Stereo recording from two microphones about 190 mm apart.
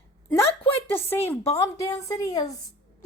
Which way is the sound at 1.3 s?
15° left (ahead or behind).